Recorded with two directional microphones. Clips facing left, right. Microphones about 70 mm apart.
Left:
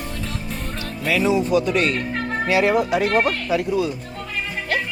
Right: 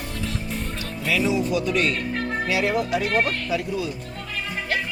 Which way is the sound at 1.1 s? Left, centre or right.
Left.